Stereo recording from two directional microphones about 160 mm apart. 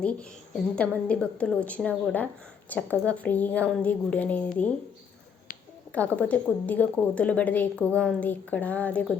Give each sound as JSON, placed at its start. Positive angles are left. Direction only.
{"t": 0.0, "sound": "a woman's voice", "side_deg": 5}
{"t": 5.9, "sound": "a woman's voice", "side_deg": 10}